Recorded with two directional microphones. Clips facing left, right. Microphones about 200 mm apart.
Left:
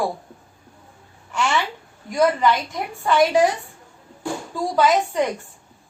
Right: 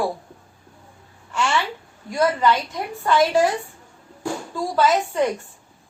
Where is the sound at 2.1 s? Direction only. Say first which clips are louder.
Left 1 dB; 15° left (ahead or behind).